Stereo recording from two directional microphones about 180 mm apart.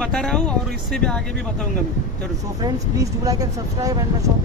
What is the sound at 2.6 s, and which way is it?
Speech, 20° right (ahead or behind).